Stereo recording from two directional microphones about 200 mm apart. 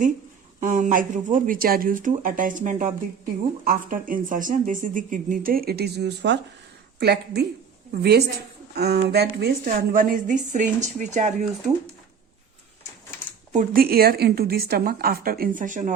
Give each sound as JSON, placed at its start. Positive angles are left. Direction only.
{"t": 0.6, "sound": "speech", "side_deg": -40}
{"t": 13.5, "sound": "speech", "side_deg": -45}